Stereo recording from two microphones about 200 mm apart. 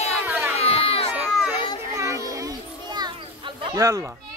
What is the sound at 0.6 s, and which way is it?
Crowd, 30° left (ahead or behind).